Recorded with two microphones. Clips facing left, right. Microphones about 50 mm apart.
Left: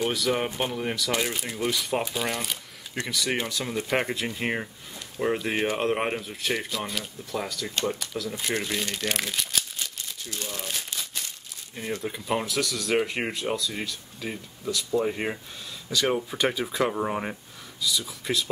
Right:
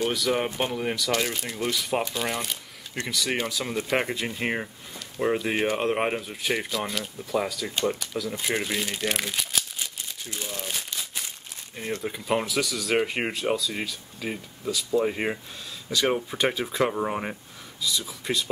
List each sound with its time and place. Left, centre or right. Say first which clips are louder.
0.1 s speech: right 1 dB; centre
10.5 s crumpling: right 1 dB; centre
12.0 s speech: right 2 dB; centre